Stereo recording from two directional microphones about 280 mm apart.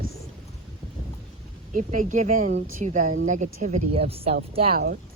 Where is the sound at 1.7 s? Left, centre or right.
Right.